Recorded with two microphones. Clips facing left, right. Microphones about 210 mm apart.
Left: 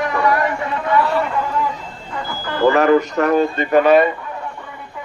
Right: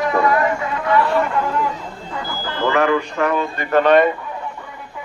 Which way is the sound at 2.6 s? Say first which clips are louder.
Left 5 dB; 40° left (ahead or behind).